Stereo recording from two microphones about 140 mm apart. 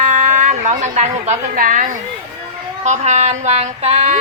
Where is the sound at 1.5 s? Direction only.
80° right.